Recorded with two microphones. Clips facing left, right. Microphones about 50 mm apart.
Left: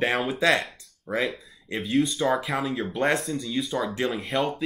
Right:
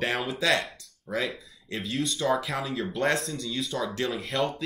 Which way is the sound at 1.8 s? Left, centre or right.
Centre.